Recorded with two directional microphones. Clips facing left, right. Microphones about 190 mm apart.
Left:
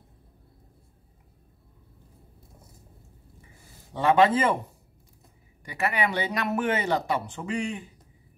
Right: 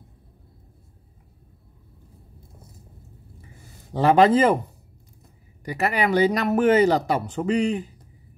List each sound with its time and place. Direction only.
3.9 s speech: 35° right (ahead or behind)
5.7 s speech: 40° right (ahead or behind)